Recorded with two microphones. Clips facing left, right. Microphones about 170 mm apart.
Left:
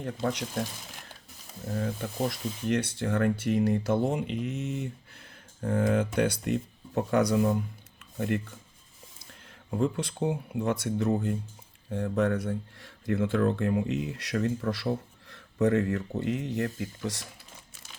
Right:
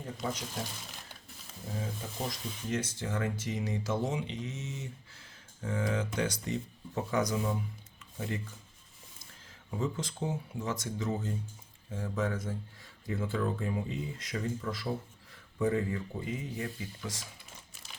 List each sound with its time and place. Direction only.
0.0 s speech: 70° left (ahead or behind)
1.7 s speech: 65° left (ahead or behind)
9.7 s speech: 60° left (ahead or behind)